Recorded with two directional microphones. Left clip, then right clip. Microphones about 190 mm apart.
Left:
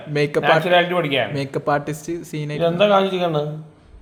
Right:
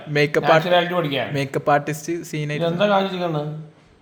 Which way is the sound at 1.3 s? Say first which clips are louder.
Right 2 dB; 5° right (ahead or behind).